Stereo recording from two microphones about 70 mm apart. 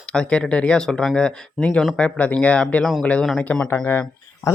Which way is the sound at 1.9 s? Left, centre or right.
Centre.